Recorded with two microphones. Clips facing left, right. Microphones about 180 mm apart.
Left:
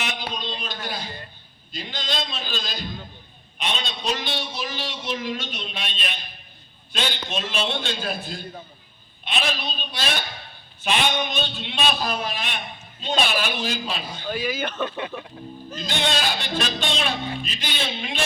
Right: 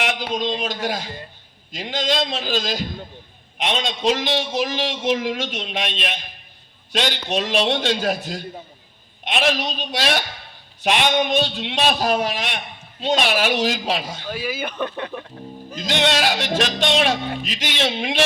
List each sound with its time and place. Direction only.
0.6 s a man's voice: 90° right
6.9 s a man's voice: 70° right (ahead or behind); by 8.4 s 90° right
9.2 s music: 90° right
11.4 s a man's voice: 75° right (ahead or behind)
13.0 s music: 80° right
14.3 s speech: 5° right (ahead or behind)
14.8 s speech: 15° left (ahead or behind)
15.9 s music: 85° right